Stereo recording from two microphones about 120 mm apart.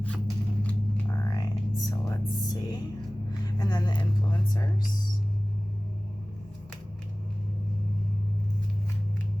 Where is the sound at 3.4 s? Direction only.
35° left (ahead or behind).